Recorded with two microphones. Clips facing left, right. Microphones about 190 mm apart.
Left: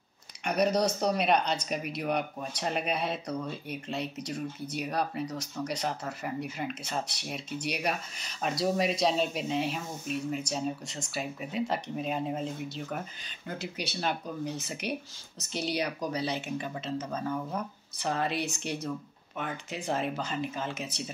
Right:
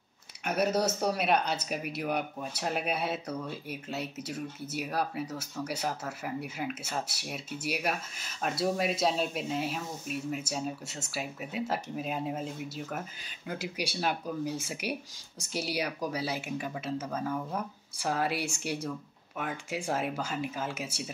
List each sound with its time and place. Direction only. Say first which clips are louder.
0.5 s speech: left 2 dB; 5° right (ahead or behind)